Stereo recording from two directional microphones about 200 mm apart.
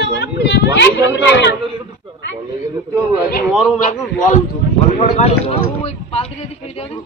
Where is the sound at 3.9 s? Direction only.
35° left (ahead or behind).